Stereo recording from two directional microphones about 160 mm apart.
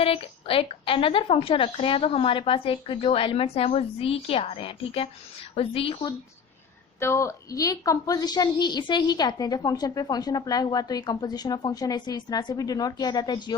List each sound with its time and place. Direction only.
0.0 s a woman's voice: 35° left (ahead or behind)
7.0 s a woman's voice: 15° left (ahead or behind)